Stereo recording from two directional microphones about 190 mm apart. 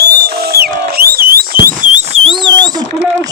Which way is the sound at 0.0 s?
55° right (ahead or behind).